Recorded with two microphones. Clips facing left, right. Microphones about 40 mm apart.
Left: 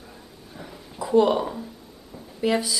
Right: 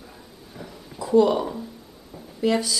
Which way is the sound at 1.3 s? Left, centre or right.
Centre.